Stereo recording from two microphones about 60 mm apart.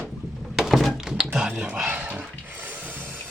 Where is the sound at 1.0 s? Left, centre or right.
Centre.